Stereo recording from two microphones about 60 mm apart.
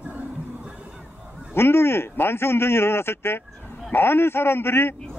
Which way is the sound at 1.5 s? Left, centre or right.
Left.